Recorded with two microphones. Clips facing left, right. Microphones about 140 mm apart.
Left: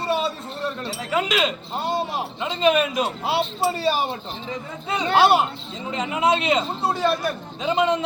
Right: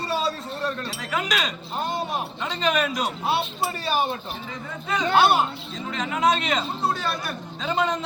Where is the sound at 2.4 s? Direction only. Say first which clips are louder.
Left 5 dB; 20° left (ahead or behind).